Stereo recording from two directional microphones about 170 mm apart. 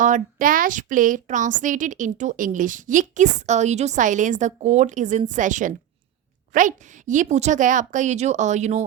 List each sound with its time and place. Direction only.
0.0 s a woman's voice: 50° right (ahead or behind)